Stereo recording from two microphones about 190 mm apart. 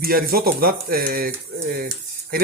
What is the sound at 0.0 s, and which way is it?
Speech, 50° right (ahead or behind).